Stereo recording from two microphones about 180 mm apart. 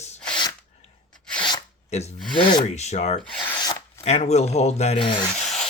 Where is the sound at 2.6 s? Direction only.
40° left (ahead or behind).